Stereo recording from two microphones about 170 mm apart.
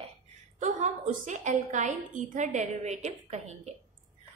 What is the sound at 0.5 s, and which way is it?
A woman's voice, 45° right (ahead or behind).